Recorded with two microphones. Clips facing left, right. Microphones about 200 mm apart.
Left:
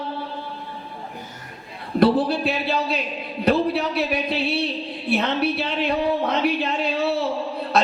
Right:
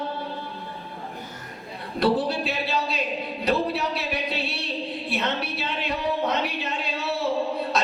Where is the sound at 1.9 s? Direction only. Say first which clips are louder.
Left 5 dB; 55° left (ahead or behind).